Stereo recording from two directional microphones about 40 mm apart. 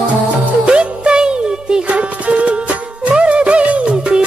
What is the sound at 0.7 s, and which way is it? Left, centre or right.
Music, right.